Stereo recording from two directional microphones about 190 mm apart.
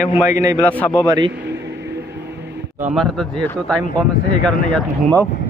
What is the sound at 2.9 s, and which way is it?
Speech, centre (ahead or behind).